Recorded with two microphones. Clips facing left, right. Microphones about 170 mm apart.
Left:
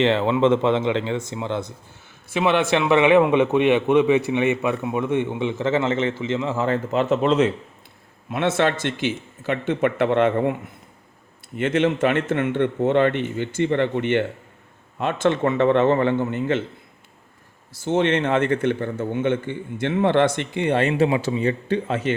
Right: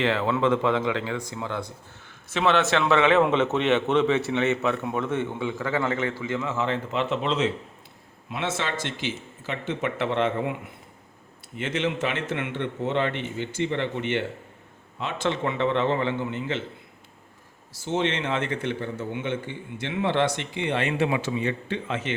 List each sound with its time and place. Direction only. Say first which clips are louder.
0.0 s speech: left 5 dB; 25° left (ahead or behind)
2.3 s a man's voice: left 3 dB; 10° left (ahead or behind); by 10.5 s 55° left (ahead or behind)
11.5 s a man's voice: left 7 dB; 55° left (ahead or behind)
17.7 s a man's voice: left 6 dB; 55° left (ahead or behind); by 22.1 s 40° left (ahead or behind)